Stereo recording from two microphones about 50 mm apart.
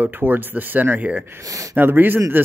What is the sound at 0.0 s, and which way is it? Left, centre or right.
Speech, right.